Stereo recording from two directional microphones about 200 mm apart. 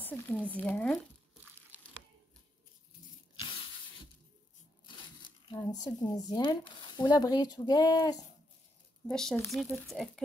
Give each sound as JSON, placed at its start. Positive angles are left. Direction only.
{"t": 0.0, "sound": "speech", "side_deg": 10}
{"t": 5.8, "sound": "speech", "side_deg": 20}
{"t": 9.0, "sound": "speech", "side_deg": 5}